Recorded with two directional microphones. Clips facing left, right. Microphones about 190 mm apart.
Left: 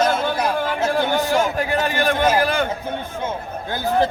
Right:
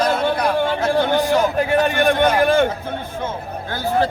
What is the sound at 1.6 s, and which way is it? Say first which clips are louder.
A man's voice: right 4 dB; 25° right (ahead or behind).